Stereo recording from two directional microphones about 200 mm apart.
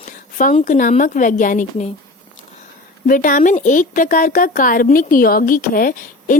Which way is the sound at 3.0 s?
45° left (ahead or behind).